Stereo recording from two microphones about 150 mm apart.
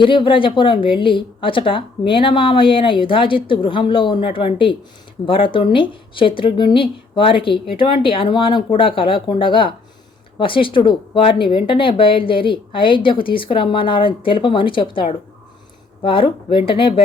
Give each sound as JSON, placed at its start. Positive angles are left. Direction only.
{"t": 0.0, "sound": "speech", "side_deg": 35}